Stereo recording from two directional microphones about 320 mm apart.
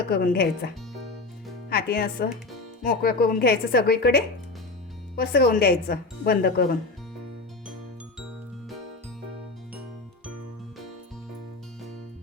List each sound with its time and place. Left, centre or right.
0.1 s speech: left